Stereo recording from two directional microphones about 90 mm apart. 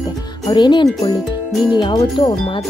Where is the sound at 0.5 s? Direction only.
55° left (ahead or behind).